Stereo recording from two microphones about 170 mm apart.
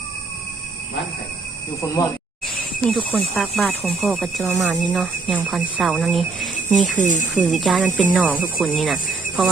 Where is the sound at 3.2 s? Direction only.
5° left (ahead or behind).